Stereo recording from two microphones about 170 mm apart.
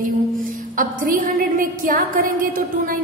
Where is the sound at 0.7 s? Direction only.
50° right (ahead or behind).